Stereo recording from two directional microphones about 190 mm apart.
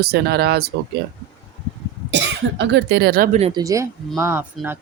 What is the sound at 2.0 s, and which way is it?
Speech, 70° right (ahead or behind).